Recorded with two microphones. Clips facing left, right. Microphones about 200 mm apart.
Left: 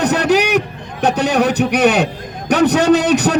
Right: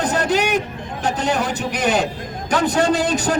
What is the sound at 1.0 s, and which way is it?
A man's voice, 70° left (ahead or behind).